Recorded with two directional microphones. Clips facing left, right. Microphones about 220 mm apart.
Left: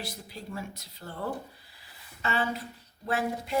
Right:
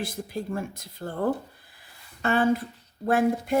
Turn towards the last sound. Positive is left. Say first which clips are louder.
# right 7 dB
turn(degrees=-50)  # may be behind; listen again after turning